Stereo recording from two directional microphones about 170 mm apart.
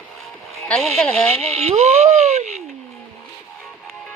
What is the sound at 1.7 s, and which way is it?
Dog, 40° right (ahead or behind).